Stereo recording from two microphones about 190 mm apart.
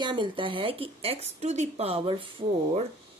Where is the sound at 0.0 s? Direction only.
25° right (ahead or behind).